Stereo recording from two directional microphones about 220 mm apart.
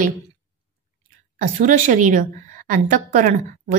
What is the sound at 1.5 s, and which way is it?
A woman's voice, 35° right (ahead or behind).